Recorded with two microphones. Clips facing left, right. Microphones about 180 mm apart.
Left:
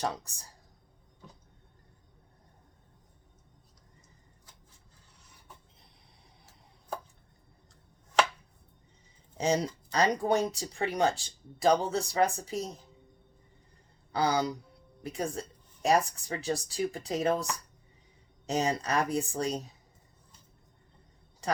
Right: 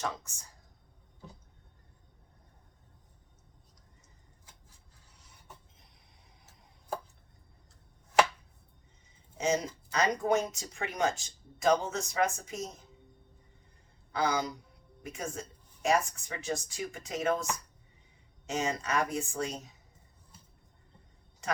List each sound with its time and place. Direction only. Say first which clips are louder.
0.0 s speech: left 3 dB; 35° left (ahead or behind)
9.4 s speech: left 2 dB; 35° left (ahead or behind)
14.1 s speech: left 3 dB; 35° left (ahead or behind)
18.4 s speech: left 3 dB; 35° left (ahead or behind)
21.4 s a sound: left 3 dB; 35° left (ahead or behind)